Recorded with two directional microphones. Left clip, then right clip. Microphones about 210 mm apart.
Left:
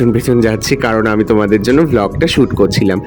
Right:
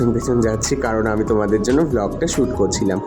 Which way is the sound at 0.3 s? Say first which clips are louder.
Left 6 dB; 40° left (ahead or behind).